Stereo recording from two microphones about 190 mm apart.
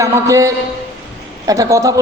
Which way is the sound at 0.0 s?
15° right (ahead or behind).